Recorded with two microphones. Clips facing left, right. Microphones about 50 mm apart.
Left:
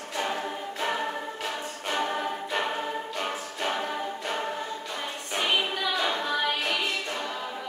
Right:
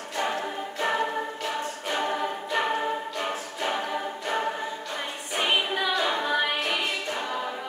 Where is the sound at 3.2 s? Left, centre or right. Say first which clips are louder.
Right 1 dB; centre.